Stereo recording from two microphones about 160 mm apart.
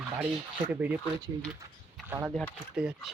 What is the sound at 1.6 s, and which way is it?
Speech, 20° right (ahead or behind).